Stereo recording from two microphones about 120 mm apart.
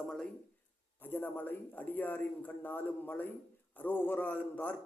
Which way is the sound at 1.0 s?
15° left (ahead or behind).